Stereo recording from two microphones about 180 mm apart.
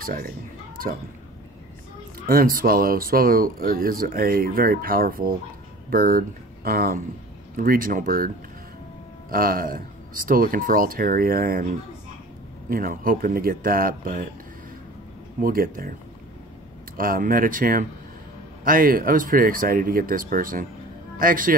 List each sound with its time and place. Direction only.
0.0 s speech: 55° right (ahead or behind)
2.1 s speech: 55° right (ahead or behind)
9.3 s speech: 50° right (ahead or behind)
15.4 s speech: 55° right (ahead or behind)
16.9 s speech: 50° right (ahead or behind)